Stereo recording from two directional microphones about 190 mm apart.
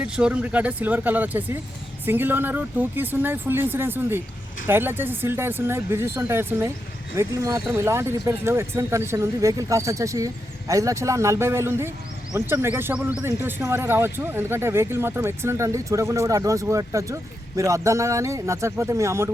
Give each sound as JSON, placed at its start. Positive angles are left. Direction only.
{"t": 0.0, "sound": "speech", "side_deg": -5}